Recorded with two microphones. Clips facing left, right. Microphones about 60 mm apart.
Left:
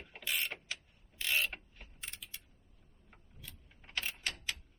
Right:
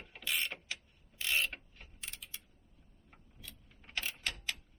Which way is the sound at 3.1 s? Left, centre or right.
Centre.